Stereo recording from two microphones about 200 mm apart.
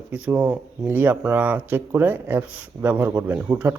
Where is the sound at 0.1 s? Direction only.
5° right (ahead or behind).